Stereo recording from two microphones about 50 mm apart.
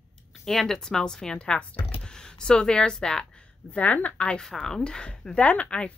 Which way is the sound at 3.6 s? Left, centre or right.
Left.